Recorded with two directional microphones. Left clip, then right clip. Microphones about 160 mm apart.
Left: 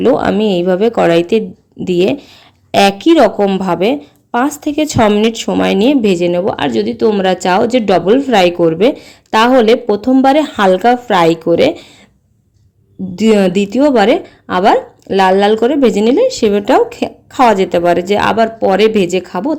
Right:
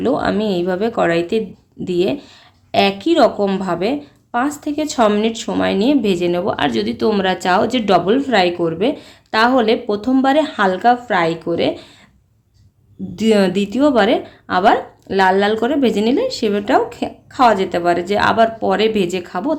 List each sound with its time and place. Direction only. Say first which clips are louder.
0.0 s a woman's voice: left 6 dB; 35° left (ahead or behind)
13.1 s a woman's voice: left 4 dB; 35° left (ahead or behind)